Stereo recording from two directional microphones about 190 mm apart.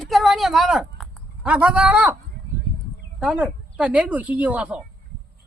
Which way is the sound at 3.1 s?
5° right (ahead or behind).